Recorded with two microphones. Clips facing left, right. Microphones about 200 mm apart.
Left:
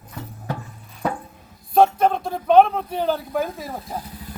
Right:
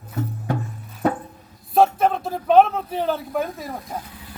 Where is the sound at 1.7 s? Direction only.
Centre (ahead or behind).